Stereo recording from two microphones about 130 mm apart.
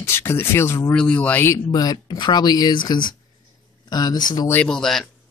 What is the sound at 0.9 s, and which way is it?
Speech, 10° left (ahead or behind).